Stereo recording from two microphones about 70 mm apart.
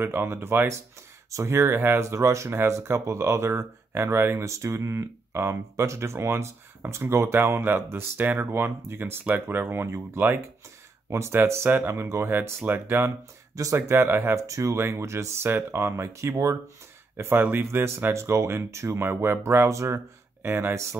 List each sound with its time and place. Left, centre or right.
0.0 s speech: right
4.5 s speech: right
14.3 s speech: right
17.2 s speech: right